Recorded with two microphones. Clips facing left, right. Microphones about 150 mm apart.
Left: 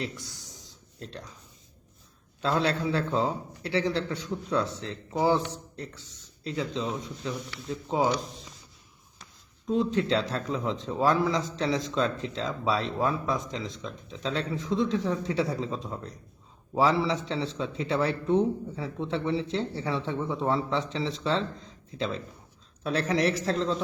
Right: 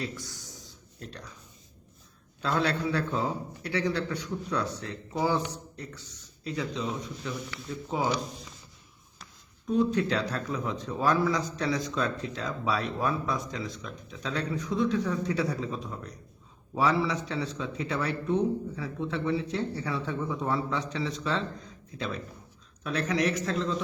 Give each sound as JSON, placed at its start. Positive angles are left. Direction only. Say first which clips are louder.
{"t": 0.0, "sound": "a sound", "louder": "left 1 dB", "side_deg": 20}
{"t": 2.4, "sound": "speech", "louder": "left 1 dB", "side_deg": 25}
{"t": 9.6, "sound": "a man's voice", "louder": "even", "side_deg": 25}